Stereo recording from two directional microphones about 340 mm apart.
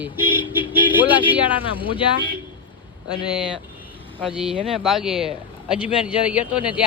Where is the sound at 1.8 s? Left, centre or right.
Centre.